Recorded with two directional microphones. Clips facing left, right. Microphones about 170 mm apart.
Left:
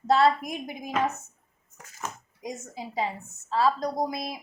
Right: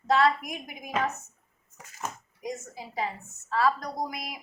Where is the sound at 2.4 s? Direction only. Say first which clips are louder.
Even; 20° left (ahead or behind).